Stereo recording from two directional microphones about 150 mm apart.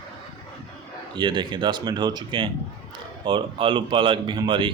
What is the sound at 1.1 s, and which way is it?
Speech, 30° right (ahead or behind).